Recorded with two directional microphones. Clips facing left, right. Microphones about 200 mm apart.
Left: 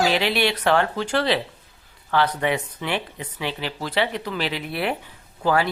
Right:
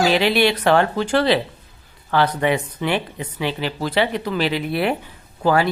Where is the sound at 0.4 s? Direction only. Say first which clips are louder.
Right 4 dB; 45° right (ahead or behind).